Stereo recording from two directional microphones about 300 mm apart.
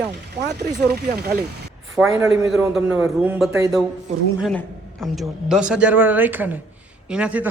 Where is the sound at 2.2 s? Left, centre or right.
Centre.